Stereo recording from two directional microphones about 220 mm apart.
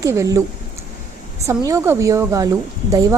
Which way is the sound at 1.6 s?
15° right (ahead or behind).